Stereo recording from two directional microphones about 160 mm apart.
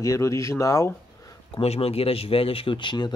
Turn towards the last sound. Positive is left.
turn(degrees=30)  # may be behind; listen again after turning